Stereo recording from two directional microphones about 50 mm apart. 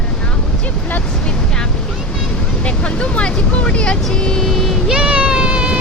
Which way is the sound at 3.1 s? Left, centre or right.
Left.